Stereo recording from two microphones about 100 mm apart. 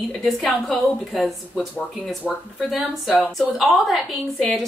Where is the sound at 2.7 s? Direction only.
Centre (ahead or behind).